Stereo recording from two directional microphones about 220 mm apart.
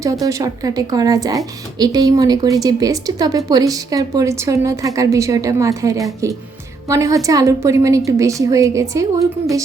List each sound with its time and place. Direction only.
0.0 s a woman's voice: 15° right (ahead or behind)